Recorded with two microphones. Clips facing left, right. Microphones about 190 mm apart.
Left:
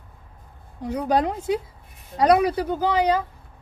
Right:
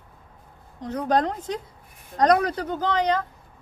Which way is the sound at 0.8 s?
10° left (ahead or behind).